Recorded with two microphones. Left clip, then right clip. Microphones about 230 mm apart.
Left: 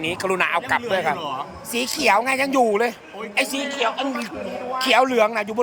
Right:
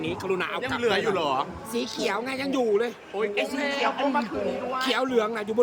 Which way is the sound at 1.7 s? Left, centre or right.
Centre.